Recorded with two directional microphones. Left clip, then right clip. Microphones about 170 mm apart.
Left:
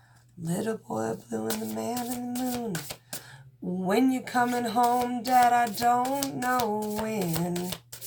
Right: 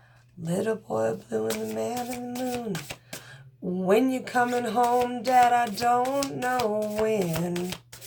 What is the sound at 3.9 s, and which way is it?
Speech, 15° right (ahead or behind).